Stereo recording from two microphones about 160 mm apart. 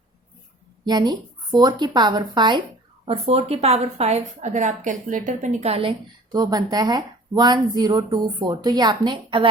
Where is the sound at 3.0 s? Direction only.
40° right (ahead or behind).